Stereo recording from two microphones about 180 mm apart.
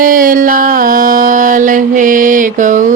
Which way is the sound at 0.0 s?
50° right (ahead or behind).